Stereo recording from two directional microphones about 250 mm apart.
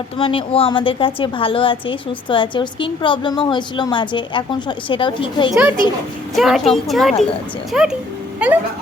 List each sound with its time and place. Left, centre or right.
0.2 s a woman's voice: left
5.5 s a woman's voice: centre